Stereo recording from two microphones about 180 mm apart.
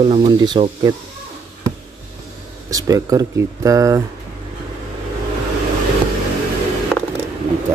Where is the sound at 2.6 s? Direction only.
20° right (ahead or behind).